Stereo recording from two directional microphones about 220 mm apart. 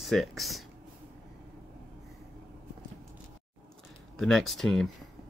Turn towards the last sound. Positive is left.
turn(degrees=0)  # may be behind; listen again after turning